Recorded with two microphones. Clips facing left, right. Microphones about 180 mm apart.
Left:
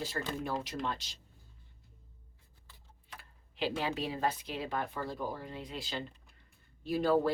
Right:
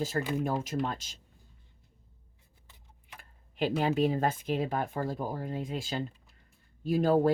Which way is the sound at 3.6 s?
50° right (ahead or behind).